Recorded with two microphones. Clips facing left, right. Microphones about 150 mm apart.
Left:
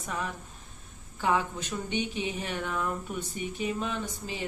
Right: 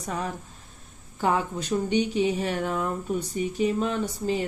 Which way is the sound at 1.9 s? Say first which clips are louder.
Right 8 dB; 40° right (ahead or behind).